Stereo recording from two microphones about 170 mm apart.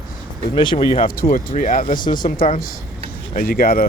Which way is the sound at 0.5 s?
30° left (ahead or behind).